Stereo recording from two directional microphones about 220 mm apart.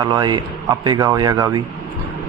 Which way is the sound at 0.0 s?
20° right (ahead or behind).